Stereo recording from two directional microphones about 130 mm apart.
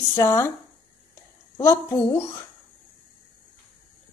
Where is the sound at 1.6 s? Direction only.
20° left (ahead or behind).